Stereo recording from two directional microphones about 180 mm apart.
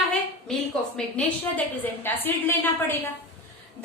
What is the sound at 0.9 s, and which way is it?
A woman's voice, 10° left (ahead or behind).